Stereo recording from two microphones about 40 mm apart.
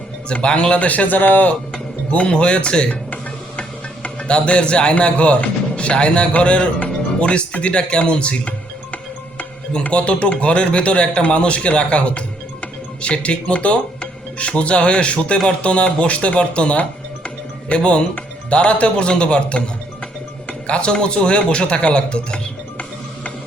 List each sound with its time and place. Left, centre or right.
0.3 s speech: left
2.0 s speech: left